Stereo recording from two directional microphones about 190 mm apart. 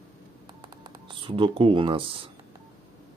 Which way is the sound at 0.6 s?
25° right (ahead or behind).